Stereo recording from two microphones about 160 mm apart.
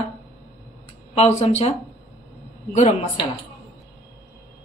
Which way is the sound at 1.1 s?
40° left (ahead or behind).